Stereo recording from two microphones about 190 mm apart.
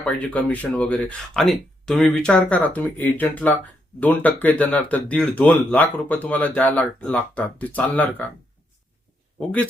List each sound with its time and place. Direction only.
0.0 s speech: 5° left (ahead or behind)